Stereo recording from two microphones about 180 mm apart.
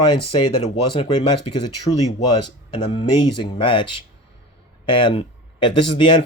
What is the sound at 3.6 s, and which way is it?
Speech, 30° left (ahead or behind).